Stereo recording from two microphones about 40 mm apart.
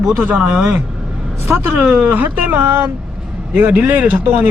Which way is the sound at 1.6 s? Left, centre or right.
Right.